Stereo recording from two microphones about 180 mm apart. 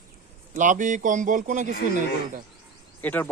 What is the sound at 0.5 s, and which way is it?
Speech, 45° right (ahead or behind).